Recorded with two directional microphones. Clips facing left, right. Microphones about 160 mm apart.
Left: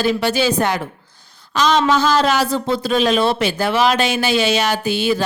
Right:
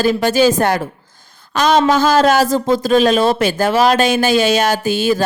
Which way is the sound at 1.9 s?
45° right (ahead or behind).